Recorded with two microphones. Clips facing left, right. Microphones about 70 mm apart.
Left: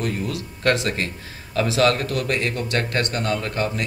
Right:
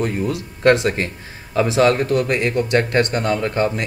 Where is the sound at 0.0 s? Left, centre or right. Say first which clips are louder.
Right 4 dB; right.